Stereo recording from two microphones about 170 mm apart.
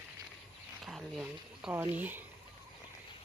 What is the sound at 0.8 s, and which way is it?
Speech, centre (ahead or behind).